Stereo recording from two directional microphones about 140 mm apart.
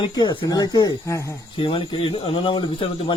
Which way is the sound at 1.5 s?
40° left (ahead or behind).